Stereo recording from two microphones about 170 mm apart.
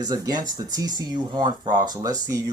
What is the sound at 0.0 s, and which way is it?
Speech, 20° right (ahead or behind).